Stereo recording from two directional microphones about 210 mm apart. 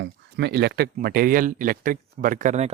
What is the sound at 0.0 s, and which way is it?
Speech, 55° right (ahead or behind).